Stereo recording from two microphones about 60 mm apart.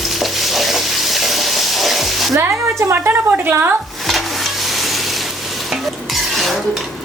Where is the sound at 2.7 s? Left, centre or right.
Right.